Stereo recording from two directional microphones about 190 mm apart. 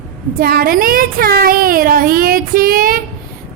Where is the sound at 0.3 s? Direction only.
50° right (ahead or behind).